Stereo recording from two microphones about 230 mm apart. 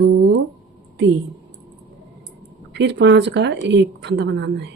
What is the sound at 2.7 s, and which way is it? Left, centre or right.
A woman's voice, right.